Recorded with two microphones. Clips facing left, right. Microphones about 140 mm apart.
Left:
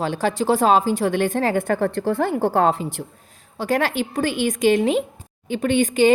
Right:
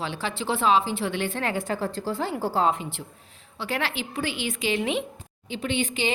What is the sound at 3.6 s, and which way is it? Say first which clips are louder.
A woman's voice: left 8 dB; 45° left (ahead or behind).